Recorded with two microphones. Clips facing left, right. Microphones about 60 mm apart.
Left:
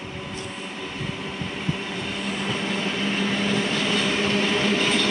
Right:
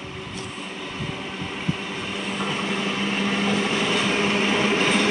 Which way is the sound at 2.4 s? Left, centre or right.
Centre.